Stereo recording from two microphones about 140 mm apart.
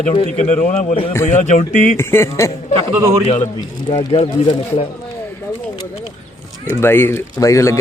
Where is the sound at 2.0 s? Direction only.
20° left (ahead or behind).